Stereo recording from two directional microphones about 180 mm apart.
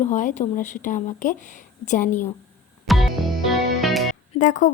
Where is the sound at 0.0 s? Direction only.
45° left (ahead or behind).